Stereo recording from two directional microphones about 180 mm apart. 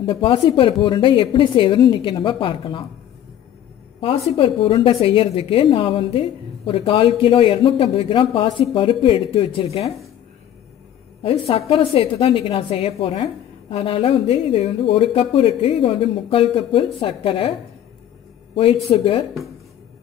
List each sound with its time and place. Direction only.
0.0 s a woman's voice: 30° left (ahead or behind)
4.0 s a woman's voice: 30° left (ahead or behind)
11.2 s a woman's voice: 30° left (ahead or behind)
18.5 s a woman's voice: 30° left (ahead or behind)